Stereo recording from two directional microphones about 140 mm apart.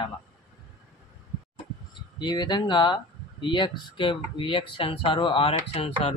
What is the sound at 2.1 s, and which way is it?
Speech, 30° left (ahead or behind).